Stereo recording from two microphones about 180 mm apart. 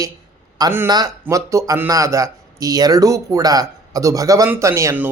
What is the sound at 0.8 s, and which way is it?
A man's voice, 20° right (ahead or behind).